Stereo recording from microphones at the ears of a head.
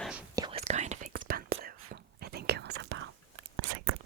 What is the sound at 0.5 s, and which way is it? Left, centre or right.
Whispering, right.